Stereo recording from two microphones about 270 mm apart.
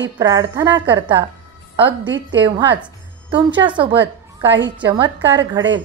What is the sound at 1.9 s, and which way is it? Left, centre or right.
Speech, right.